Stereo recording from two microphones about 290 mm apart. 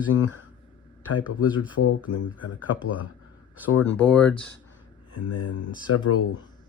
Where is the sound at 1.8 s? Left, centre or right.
Left.